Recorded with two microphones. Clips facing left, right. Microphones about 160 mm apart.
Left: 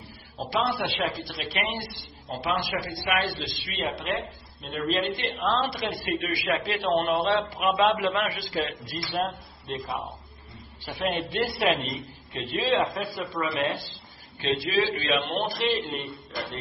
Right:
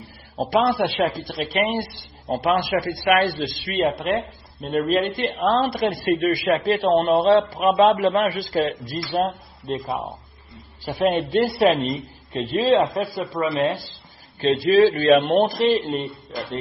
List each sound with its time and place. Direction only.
0.4 s a man's voice: 50° right (ahead or behind)